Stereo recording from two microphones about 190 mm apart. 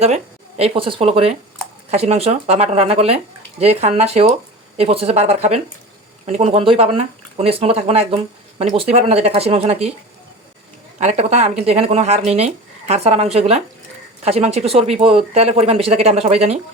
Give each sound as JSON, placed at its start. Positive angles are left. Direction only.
{"t": 0.0, "sound": "speech", "side_deg": -35}
{"t": 10.9, "sound": "speech", "side_deg": -35}